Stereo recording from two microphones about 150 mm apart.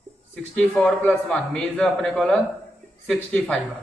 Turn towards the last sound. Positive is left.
turn(degrees=5)  # may be behind; listen again after turning